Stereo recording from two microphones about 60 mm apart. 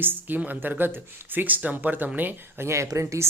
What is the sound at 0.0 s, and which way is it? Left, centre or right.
Speech, right.